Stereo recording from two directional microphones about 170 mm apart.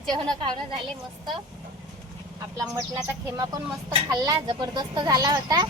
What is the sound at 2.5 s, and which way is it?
Speech, 25° right (ahead or behind).